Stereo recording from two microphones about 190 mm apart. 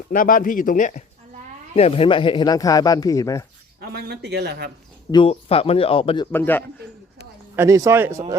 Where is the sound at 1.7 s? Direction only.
30° left (ahead or behind).